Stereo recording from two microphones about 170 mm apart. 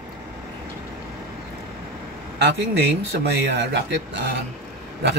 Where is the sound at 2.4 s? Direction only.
90° right.